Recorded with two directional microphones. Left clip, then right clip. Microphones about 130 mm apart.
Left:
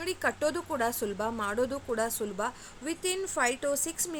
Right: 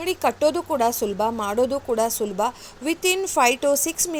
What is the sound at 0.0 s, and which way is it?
A woman's voice, 20° right (ahead or behind).